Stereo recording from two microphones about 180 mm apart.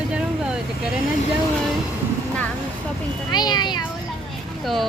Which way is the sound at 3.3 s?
25° left (ahead or behind).